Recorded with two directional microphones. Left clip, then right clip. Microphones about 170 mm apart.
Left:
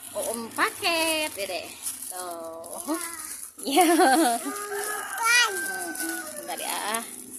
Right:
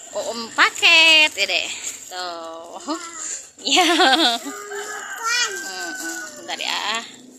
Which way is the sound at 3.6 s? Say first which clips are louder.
Right 4 dB; 15° left (ahead or behind).